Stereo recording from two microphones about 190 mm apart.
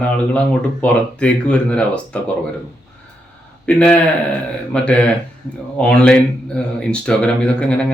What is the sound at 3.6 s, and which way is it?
A man's voice, 5° left (ahead or behind).